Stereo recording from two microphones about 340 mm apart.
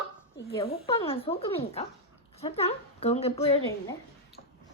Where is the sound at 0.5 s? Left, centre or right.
Centre.